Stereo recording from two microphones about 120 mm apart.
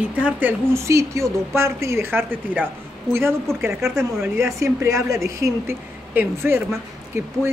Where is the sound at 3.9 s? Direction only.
20° right (ahead or behind).